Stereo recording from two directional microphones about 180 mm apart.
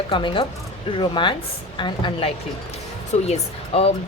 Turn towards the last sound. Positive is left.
turn(degrees=35)  # may be behind; listen again after turning